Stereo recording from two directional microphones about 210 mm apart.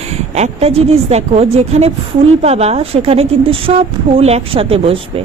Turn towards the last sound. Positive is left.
turn(degrees=-25)  # may be behind; listen again after turning